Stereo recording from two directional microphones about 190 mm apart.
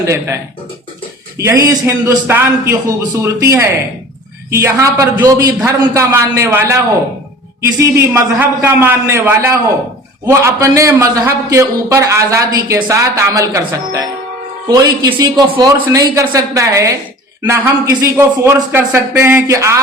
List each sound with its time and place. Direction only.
0.0 s a man's voice: 15° right (ahead or behind)
1.4 s a man's voice: 15° right (ahead or behind)